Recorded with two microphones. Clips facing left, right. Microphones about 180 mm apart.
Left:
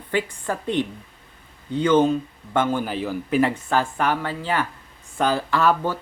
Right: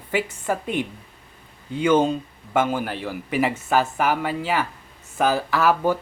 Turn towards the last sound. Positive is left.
turn(degrees=-10)  # may be behind; listen again after turning